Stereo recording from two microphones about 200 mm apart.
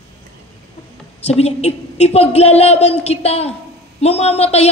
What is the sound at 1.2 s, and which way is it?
A woman's voice, 30° left (ahead or behind).